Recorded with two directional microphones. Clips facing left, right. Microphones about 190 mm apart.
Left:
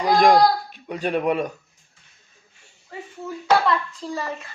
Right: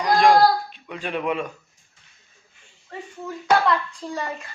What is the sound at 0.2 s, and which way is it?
A child's voice, 45° left (ahead or behind).